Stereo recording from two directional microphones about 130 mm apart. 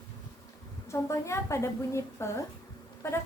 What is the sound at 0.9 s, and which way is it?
A woman's voice, 20° left (ahead or behind).